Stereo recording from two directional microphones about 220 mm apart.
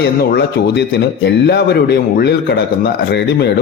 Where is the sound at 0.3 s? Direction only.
50° left (ahead or behind).